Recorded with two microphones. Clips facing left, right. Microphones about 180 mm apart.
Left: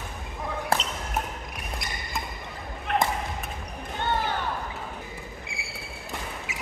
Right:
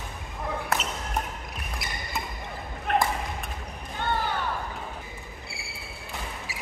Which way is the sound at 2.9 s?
50° right (ahead or behind).